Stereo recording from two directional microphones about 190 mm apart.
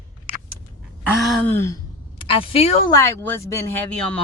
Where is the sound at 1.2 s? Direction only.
10° left (ahead or behind).